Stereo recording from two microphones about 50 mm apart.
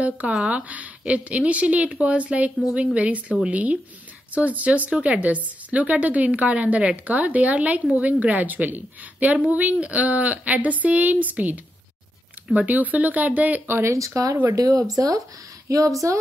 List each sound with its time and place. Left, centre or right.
0.0 s a woman's voice: right
13.8 s speech: right